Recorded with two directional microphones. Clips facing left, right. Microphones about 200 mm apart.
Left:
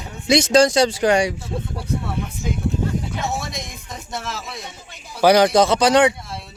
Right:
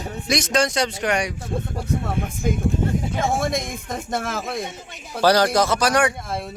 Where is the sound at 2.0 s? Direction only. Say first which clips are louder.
Right 2 dB; 50° right (ahead or behind).